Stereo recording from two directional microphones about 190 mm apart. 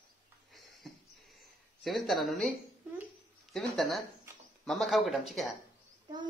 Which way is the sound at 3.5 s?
Centre (ahead or behind).